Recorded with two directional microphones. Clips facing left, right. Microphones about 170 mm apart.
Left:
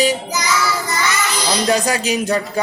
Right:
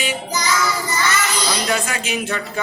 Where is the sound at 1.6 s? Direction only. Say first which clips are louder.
Left 5 dB; 35° left (ahead or behind).